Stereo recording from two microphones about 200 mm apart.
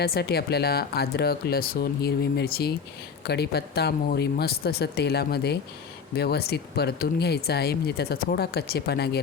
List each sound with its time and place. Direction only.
0.0 s speech: 50° left (ahead or behind)